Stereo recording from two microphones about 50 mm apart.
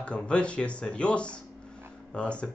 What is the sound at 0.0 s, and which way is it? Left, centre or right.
Speech, left.